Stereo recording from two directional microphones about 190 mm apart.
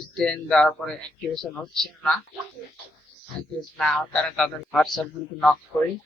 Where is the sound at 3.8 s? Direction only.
5° left (ahead or behind).